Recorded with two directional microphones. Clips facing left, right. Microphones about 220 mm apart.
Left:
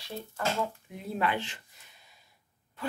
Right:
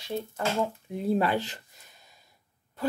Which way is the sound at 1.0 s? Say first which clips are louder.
Right 6 dB; 35° right (ahead or behind).